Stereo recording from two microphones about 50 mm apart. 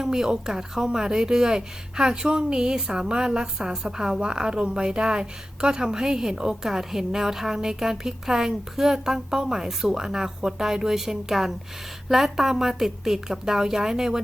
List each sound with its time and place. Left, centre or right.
0.0 s speech: centre